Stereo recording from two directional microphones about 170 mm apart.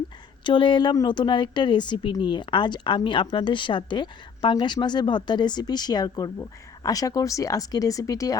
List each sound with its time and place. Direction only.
0.4 s speech: 30° left (ahead or behind)